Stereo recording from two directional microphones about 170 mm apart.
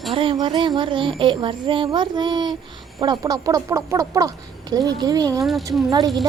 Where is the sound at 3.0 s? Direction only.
25° right (ahead or behind).